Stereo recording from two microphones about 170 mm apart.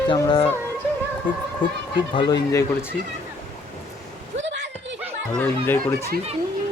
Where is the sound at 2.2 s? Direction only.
25° left (ahead or behind).